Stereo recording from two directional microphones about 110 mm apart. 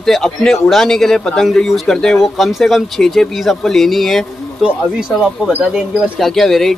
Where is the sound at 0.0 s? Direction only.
5° left (ahead or behind).